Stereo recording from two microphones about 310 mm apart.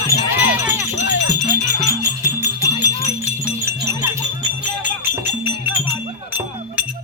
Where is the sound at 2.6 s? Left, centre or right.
Centre.